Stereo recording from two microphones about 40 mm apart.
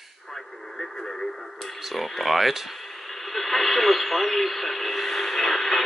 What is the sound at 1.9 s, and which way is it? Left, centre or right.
Speech, centre.